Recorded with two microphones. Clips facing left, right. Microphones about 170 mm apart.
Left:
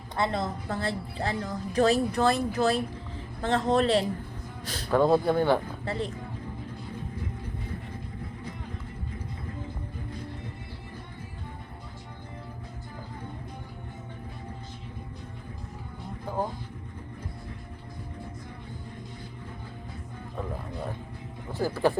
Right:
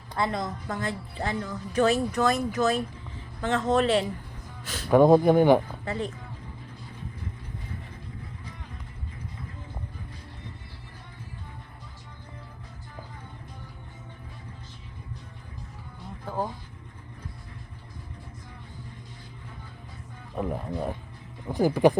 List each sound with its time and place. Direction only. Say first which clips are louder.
0.2 s a woman's voice: even; 25° left (ahead or behind)
4.9 s speech: right 5 dB; 15° right (ahead or behind)
5.8 s a woman's voice: even; 35° left (ahead or behind)
20.4 s music: right 6 dB; 20° right (ahead or behind)
21.5 s a sound: right 5 dB; 15° right (ahead or behind)